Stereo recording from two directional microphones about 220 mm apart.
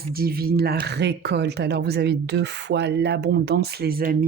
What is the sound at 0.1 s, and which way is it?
Speech, 45° right (ahead or behind).